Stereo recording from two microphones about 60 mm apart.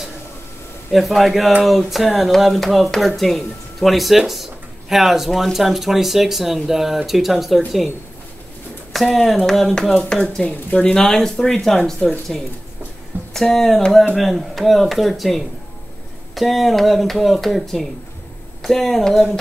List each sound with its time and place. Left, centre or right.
0.9 s speech: centre
8.9 s speech: centre